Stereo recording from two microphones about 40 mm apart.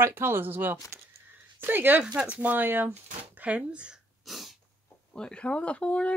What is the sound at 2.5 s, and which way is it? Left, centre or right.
Speech, right.